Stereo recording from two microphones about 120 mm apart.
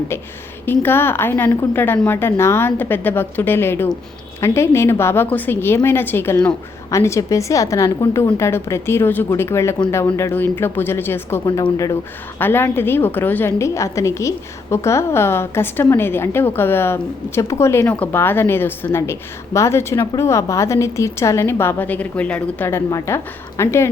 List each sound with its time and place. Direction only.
0.6 s a woman's voice: 15° left (ahead or behind)